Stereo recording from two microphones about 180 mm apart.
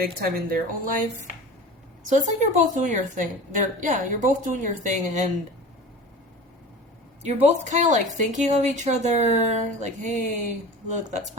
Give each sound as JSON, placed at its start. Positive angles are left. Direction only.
{"t": 0.2, "sound": "a woman's voice", "side_deg": -50}
{"t": 7.2, "sound": "a woman's voice", "side_deg": -40}